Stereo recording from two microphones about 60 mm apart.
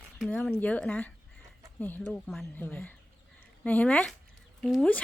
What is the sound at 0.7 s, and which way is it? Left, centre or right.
A woman's voice, left.